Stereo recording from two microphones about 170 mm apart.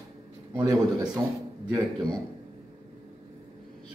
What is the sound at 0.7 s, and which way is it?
Speech, 20° right (ahead or behind).